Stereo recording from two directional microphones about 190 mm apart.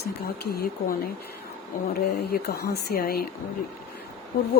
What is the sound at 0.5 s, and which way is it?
Speech, 50° left (ahead or behind).